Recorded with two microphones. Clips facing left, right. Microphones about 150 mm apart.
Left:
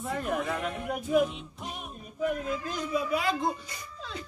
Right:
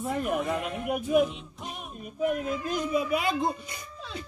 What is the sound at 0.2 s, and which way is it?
Speech, 15° right (ahead or behind).